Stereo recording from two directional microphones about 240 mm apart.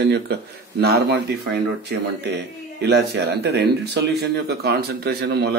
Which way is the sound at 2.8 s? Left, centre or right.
Right.